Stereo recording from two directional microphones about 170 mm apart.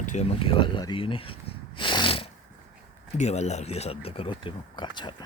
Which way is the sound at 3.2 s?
40° left (ahead or behind).